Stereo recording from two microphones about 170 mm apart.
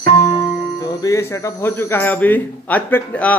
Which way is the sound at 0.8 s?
20° left (ahead or behind).